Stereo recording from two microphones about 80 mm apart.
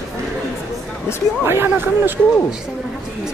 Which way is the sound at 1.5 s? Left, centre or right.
Right.